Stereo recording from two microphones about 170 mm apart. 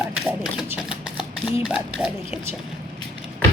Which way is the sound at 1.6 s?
5° right (ahead or behind).